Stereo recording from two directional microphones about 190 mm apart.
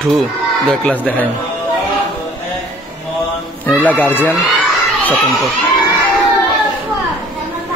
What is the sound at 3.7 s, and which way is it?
Speech, 10° left (ahead or behind).